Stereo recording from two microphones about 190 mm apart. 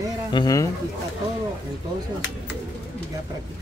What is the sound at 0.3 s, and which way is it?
Speech, 20° left (ahead or behind).